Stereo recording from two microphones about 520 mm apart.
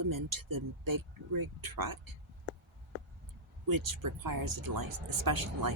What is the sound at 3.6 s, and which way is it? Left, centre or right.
Speech, right.